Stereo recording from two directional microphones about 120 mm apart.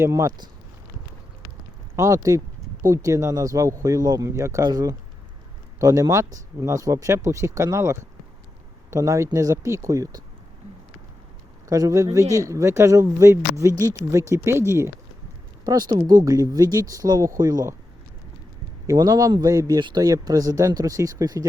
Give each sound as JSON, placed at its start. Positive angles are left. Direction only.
{"t": 0.0, "sound": "speech", "side_deg": -25}
{"t": 2.0, "sound": "speech", "side_deg": -25}
{"t": 11.7, "sound": "speech", "side_deg": -25}
{"t": 15.6, "sound": "speech", "side_deg": -35}
{"t": 18.9, "sound": "speech", "side_deg": -30}